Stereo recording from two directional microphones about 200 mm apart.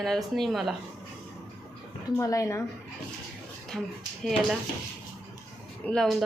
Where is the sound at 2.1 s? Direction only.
15° left (ahead or behind).